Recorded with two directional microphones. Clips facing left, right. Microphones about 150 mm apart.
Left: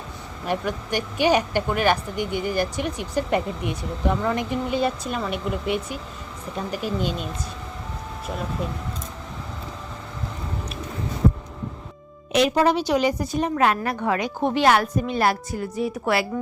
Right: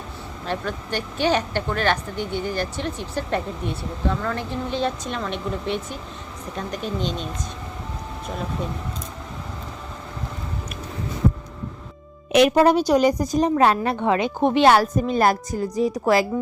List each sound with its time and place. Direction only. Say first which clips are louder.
0.4 s speech: left 2 dB; 15° left (ahead or behind)
12.3 s speech: right 4 dB; 60° right (ahead or behind)
12.6 s a woman's voice: right 3 dB; 45° right (ahead or behind)